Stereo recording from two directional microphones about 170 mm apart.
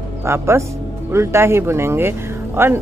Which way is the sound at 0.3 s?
15° right (ahead or behind).